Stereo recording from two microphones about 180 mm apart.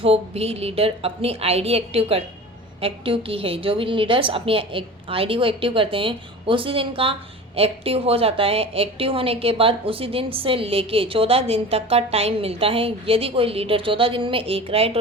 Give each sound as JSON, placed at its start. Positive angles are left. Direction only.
{"t": 0.0, "sound": "a woman's voice", "side_deg": -35}